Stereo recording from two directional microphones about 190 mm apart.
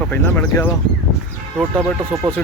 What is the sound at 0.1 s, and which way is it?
Speech, 10° left (ahead or behind).